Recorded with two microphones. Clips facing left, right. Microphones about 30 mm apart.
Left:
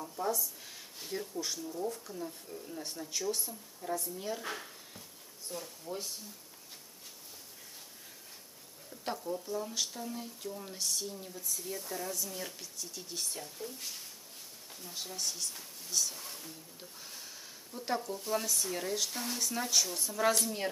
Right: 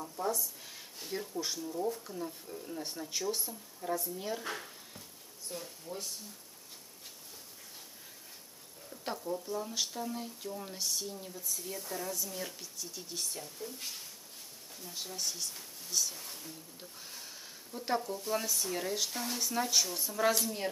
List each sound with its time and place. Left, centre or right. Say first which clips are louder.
0.1 s speech: left 1 dB; centre
5.5 s speech: left 1 dB; centre
5.9 s speech: left 3 dB; centre
8.9 s speech: even; centre
17.0 s a sound: even; centre
18.3 s speech: left 1 dB; centre